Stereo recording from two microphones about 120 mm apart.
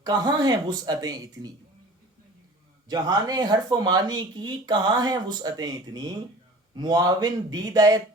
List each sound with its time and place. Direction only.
0.0 s speech: 35° right (ahead or behind)
2.9 s speech: 30° right (ahead or behind)